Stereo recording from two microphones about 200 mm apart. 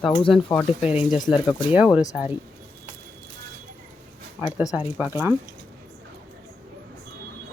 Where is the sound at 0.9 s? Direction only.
5° right (ahead or behind).